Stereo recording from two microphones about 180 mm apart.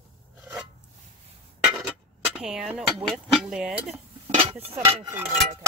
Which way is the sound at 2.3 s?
5° right (ahead or behind).